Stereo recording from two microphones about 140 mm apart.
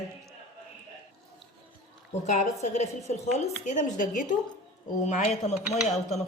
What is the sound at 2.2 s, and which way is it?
A woman's voice, 55° left (ahead or behind).